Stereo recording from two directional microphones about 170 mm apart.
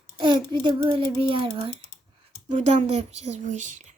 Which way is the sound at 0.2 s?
30° right (ahead or behind).